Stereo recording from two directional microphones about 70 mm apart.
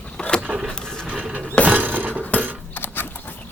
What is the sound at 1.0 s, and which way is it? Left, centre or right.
Music, centre.